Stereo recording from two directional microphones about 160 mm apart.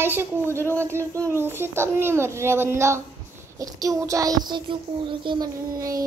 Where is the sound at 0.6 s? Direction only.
15° left (ahead or behind).